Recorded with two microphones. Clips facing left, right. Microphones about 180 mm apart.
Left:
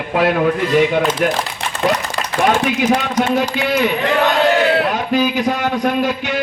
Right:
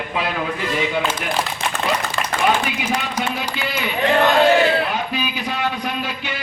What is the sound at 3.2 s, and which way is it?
Speech, 50° left (ahead or behind).